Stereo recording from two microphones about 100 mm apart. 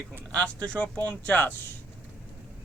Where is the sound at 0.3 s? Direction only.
10° left (ahead or behind).